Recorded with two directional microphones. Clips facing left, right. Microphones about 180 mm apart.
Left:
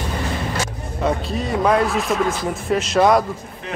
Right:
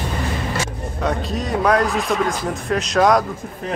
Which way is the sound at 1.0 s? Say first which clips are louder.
Left 1 dB; centre (ahead or behind).